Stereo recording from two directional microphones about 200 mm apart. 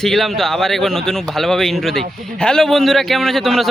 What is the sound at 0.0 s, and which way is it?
Speech, centre (ahead or behind).